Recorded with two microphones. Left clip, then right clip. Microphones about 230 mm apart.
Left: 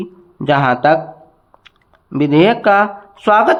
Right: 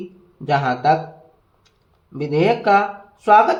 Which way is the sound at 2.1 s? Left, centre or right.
Left.